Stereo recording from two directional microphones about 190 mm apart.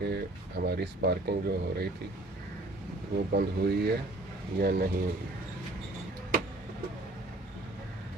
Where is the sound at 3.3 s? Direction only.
55° right (ahead or behind).